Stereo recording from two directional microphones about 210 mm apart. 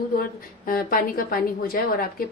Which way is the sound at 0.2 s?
45° left (ahead or behind).